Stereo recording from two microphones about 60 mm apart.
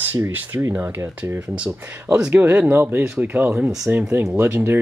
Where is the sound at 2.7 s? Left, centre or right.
Right.